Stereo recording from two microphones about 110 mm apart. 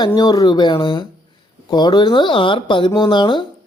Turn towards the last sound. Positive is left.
turn(degrees=45)  # may be behind; listen again after turning